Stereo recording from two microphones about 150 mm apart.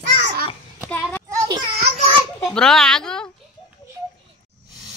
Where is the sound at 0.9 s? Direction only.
10° left (ahead or behind).